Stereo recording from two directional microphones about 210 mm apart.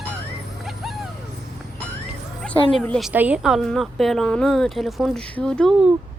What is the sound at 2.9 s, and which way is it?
Speech, 5° right (ahead or behind).